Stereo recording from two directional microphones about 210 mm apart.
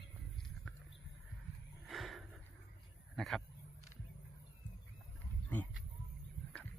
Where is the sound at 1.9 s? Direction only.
Centre (ahead or behind).